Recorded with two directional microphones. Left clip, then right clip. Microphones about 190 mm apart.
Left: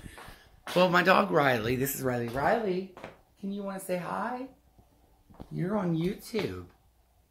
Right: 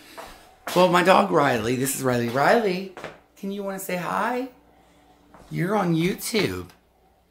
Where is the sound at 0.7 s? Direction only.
10° right (ahead or behind).